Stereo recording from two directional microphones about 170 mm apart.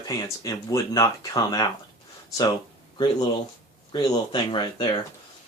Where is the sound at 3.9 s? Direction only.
25° left (ahead or behind).